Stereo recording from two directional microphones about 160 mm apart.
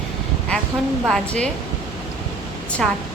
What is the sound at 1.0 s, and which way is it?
Speech, 5° left (ahead or behind).